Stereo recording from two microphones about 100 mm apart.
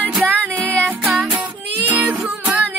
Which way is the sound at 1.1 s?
5° right (ahead or behind).